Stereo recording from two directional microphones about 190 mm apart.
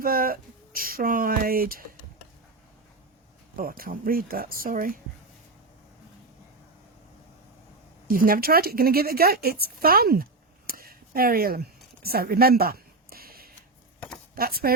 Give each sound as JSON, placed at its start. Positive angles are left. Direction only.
{"t": 0.0, "sound": "speech", "side_deg": -50}
{"t": 3.5, "sound": "speech", "side_deg": -50}
{"t": 8.0, "sound": "speech", "side_deg": -50}
{"t": 10.7, "sound": "a sound", "side_deg": -50}
{"t": 14.3, "sound": "speech", "side_deg": -50}